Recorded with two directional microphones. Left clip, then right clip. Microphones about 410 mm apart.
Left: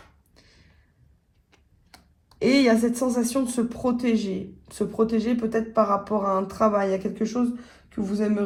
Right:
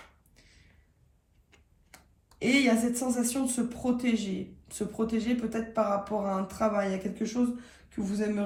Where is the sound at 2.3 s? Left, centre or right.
Centre.